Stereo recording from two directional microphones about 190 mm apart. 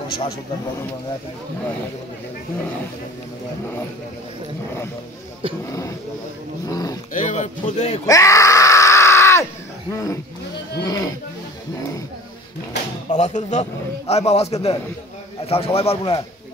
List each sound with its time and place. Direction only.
5.7 s speech: 15° left (ahead or behind)
7.2 s a man's voice: 40° left (ahead or behind)
8.1 s screaming: 15° left (ahead or behind)
10.8 s speech: 20° left (ahead or behind)
13.1 s a man's voice: 40° left (ahead or behind)